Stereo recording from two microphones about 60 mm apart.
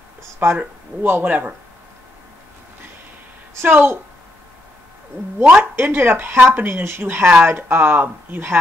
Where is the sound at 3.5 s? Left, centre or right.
Right.